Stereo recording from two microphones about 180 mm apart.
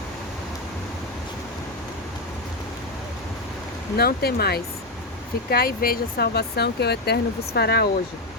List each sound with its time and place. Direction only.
3.9 s speech: 60° left (ahead or behind)